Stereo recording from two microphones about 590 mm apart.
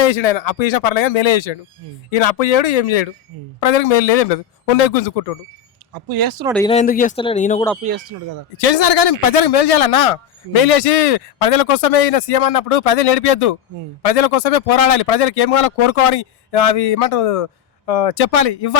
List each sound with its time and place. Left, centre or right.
0.0 s a man's voice: left
5.9 s speech: right
6.4 s speech: centre
8.5 s a man's voice: left